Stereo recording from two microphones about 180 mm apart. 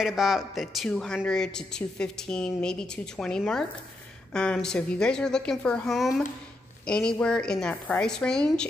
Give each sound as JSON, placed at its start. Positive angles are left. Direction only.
{"t": 0.0, "sound": "a woman's voice", "side_deg": 0}